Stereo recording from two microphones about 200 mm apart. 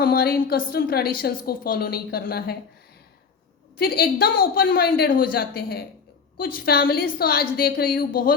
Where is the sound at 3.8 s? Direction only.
50° left (ahead or behind).